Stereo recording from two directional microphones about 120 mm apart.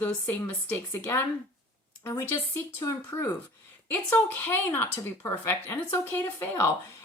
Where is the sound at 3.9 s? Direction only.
15° left (ahead or behind).